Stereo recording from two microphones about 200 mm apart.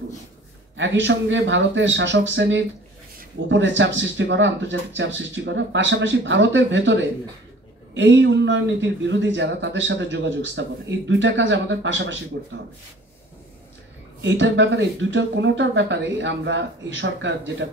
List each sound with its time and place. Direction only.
0.7 s speech: 65° right (ahead or behind)
14.2 s speech: 65° right (ahead or behind)